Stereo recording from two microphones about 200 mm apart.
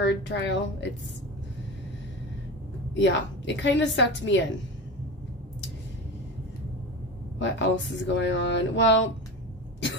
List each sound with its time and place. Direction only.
0.0 s speech: 65° left (ahead or behind)
3.0 s speech: 65° left (ahead or behind)
7.3 s speech: 65° left (ahead or behind)